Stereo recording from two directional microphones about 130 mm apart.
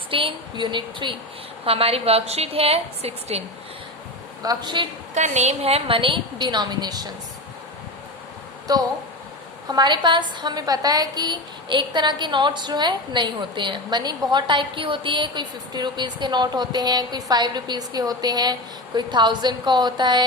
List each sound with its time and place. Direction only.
0.1 s a woman's voice: 45° right (ahead or behind)
1.6 s a woman's voice: 50° right (ahead or behind)
4.4 s a woman's voice: 35° right (ahead or behind)
5.1 s a woman's voice: 60° right (ahead or behind); by 7.1 s 30° right (ahead or behind)
9.6 s a woman's voice: 35° right (ahead or behind)